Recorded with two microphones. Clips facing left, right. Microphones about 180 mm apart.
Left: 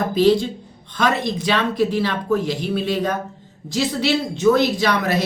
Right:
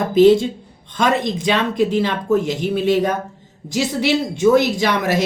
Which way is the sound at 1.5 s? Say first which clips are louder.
Right 2 dB; 20° right (ahead or behind).